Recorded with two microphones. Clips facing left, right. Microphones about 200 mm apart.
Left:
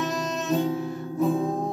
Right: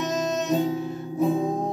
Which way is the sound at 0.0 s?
20° right (ahead or behind).